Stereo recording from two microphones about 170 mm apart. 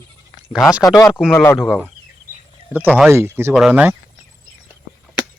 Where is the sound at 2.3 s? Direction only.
55° right (ahead or behind).